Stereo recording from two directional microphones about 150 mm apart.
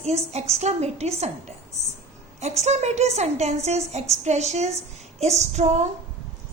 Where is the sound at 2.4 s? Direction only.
45° right (ahead or behind).